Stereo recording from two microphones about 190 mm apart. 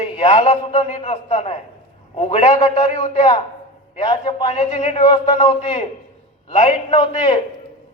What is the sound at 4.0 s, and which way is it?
A man's voice, 30° left (ahead or behind).